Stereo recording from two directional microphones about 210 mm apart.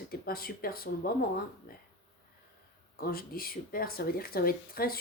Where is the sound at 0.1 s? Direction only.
45° left (ahead or behind).